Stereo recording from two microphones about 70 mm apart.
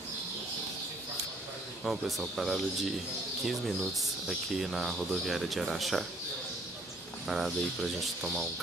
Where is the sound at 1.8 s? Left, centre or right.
Centre.